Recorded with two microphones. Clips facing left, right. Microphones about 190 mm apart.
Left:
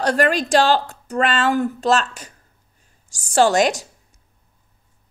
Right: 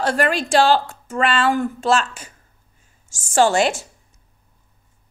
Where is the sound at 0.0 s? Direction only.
40° left (ahead or behind).